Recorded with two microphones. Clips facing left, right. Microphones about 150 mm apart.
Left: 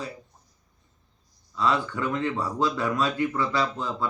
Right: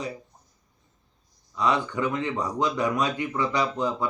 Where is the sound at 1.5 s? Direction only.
15° right (ahead or behind).